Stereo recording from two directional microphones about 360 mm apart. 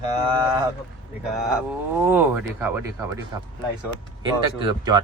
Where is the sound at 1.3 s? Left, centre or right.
Centre.